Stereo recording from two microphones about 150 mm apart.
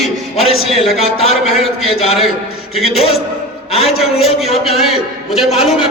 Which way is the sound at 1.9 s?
40° left (ahead or behind).